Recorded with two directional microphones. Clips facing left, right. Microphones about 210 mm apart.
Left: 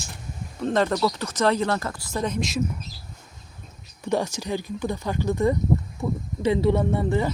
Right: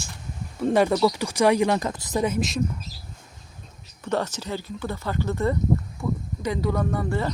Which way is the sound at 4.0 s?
10° left (ahead or behind).